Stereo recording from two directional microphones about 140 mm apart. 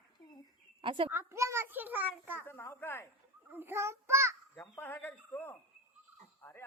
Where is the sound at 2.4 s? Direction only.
15° left (ahead or behind).